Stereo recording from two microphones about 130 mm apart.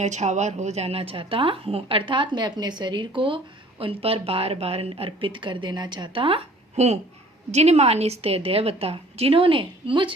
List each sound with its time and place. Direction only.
0.0 s speech: 65° right (ahead or behind); by 6.4 s 40° right (ahead or behind)
6.7 s a woman's voice: 60° right (ahead or behind); by 10.1 s 40° right (ahead or behind)